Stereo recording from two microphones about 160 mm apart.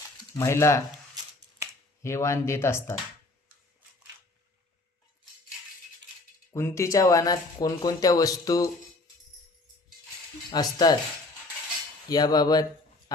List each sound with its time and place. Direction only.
0.3 s speech: 15° left (ahead or behind)
2.0 s speech: 15° left (ahead or behind)
6.5 s speech: 15° left (ahead or behind)
10.5 s speech: 25° left (ahead or behind)
12.0 s speech: 25° left (ahead or behind)